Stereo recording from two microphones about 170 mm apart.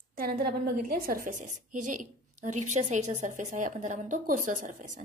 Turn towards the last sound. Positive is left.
turn(degrees=-50)  # may be behind; listen again after turning